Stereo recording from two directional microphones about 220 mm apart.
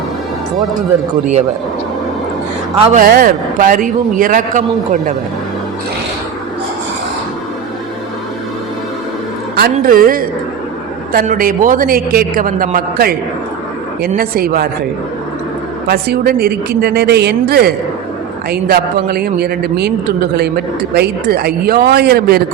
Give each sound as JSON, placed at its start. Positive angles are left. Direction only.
{"t": 2.8, "sound": "a man's voice", "side_deg": -35}
{"t": 9.6, "sound": "a man's voice", "side_deg": -40}
{"t": 15.9, "sound": "a man's voice", "side_deg": -45}